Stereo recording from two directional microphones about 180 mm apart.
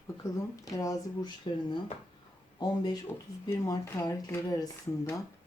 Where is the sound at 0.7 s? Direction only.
20° left (ahead or behind).